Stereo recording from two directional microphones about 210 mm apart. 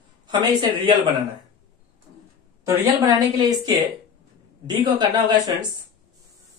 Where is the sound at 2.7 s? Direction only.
15° right (ahead or behind).